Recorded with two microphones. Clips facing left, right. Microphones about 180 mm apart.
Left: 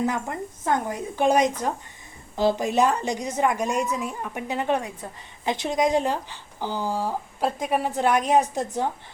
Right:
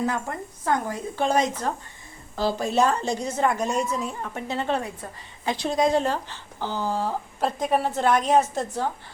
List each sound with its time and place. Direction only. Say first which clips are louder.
0.0 s speech: left 1 dB; 20° left (ahead or behind)